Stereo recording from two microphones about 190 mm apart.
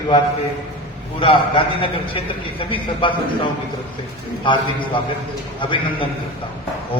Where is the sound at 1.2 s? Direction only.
25° left (ahead or behind).